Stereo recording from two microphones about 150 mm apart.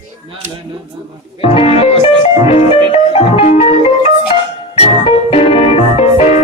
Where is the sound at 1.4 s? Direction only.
40° left (ahead or behind).